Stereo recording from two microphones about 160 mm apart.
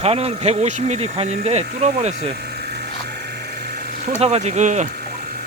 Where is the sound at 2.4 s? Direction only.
85° right.